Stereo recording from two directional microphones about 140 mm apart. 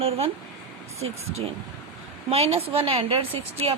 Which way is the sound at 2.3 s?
45° right (ahead or behind).